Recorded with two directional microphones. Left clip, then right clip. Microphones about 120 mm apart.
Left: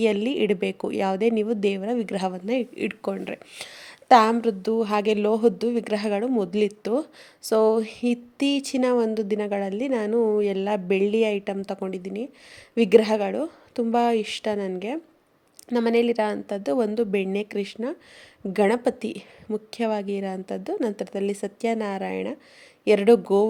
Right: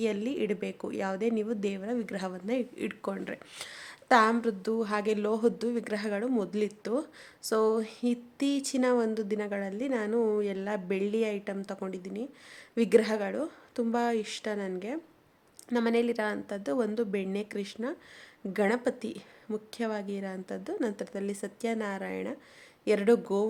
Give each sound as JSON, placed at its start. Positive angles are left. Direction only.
{"t": 0.0, "sound": "speech", "side_deg": 40}